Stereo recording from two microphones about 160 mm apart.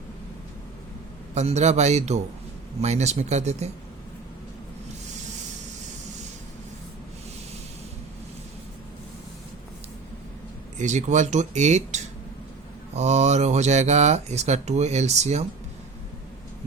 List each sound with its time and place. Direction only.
1.4 s speech: 45° right (ahead or behind)
10.8 s speech: 45° right (ahead or behind)